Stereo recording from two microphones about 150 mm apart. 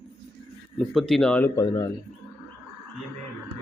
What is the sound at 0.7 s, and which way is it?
Speech, centre (ahead or behind).